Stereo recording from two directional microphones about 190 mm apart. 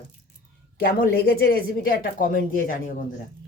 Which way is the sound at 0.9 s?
55° left (ahead or behind).